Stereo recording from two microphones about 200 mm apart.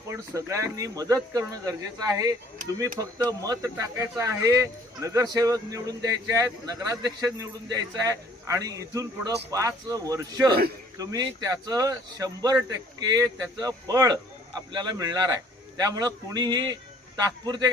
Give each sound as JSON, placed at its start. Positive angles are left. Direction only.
{"t": 0.1, "sound": "a man's voice", "side_deg": -15}